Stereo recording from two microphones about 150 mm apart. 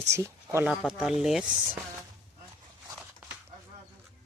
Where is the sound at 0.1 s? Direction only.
20° right (ahead or behind).